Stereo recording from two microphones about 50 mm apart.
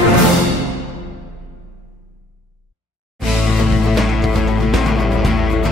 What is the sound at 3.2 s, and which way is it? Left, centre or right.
Music, centre.